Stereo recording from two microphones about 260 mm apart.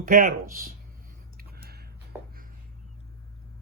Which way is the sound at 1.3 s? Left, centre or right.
Right.